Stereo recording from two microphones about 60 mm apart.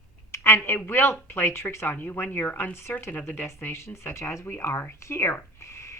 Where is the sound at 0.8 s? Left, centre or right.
Left.